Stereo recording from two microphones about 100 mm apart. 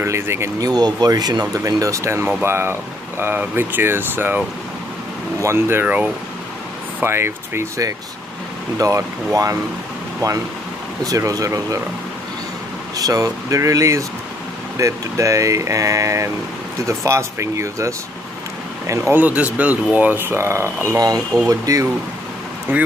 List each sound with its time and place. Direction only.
0.0 s speech: 25° right (ahead or behind)
0.7 s speech: 40° right (ahead or behind); by 4.4 s 20° right (ahead or behind)
5.4 s speech: 25° right (ahead or behind)
11.1 s speech: 35° right (ahead or behind)
12.9 s speech: 35° right (ahead or behind)
19.1 s speech: 15° right (ahead or behind); by 21.8 s 35° right (ahead or behind)